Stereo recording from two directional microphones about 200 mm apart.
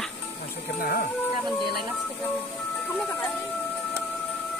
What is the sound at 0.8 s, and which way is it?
Speech, 50° left (ahead or behind).